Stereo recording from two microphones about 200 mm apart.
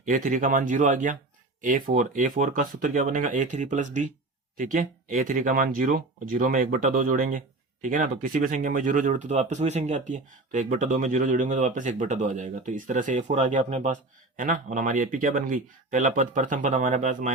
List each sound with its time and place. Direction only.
0.0 s speech: 40° right (ahead or behind)